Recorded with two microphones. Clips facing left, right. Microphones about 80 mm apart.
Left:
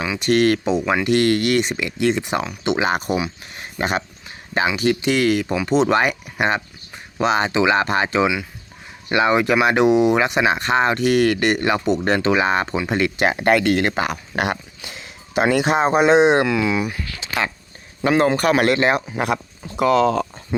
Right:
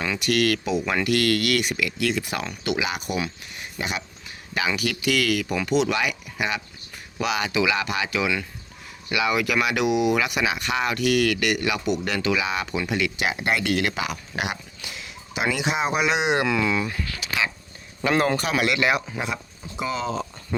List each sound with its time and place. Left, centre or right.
0.2 s speech: left
2.7 s speech: left
4.8 s speech: left
14.8 s speech: left
16.5 s speech: centre
17.2 s a sound: left
18.3 s speech: left
19.2 s speech: left